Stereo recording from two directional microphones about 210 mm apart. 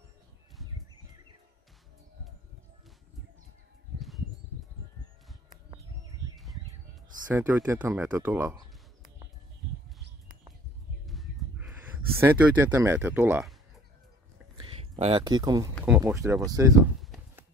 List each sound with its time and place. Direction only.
7.2 s speech: 10° right (ahead or behind)
11.1 s a sound: centre (ahead or behind)
12.2 s speech: 10° right (ahead or behind)
14.8 s speech: 30° right (ahead or behind)
15.8 s speech: 10° right (ahead or behind)